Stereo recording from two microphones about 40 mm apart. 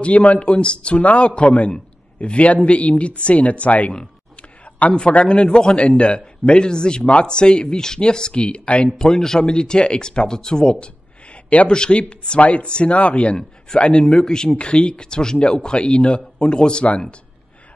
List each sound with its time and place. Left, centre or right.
0.0 s a man's voice: left
4.4 s a sound: left
4.9 s a man's voice: left
8.9 s a man's voice: centre
14.1 s a man's voice: centre
14.5 s a man's voice: left
15.3 s a man's voice: left